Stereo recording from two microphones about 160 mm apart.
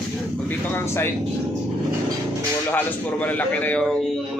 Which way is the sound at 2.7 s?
10° left (ahead or behind).